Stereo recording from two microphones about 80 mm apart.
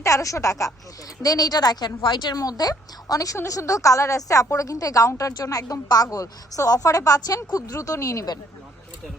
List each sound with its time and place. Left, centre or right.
0.0 s a woman's voice: left
1.2 s a woman's voice: left
2.3 s a woman's voice: left